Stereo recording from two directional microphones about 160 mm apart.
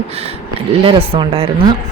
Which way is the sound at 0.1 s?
40° right (ahead or behind).